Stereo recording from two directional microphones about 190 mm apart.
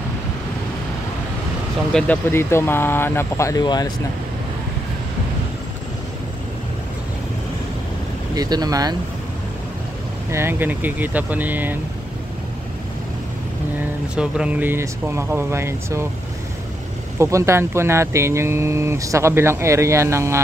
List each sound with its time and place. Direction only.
1.9 s speech: 5° left (ahead or behind); by 3.9 s 20° left (ahead or behind)
8.4 s speech: 20° right (ahead or behind)
10.3 s speech: 10° right (ahead or behind)
14.1 s speech: 5° right (ahead or behind)
17.2 s speech: 15° right (ahead or behind)